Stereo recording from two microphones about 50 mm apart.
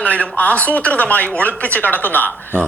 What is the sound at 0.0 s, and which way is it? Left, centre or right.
A man's voice, left.